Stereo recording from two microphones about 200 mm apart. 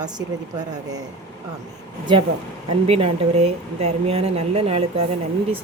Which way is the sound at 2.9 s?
30° right (ahead or behind).